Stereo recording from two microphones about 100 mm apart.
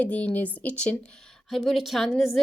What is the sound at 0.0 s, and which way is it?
Speech, 15° left (ahead or behind).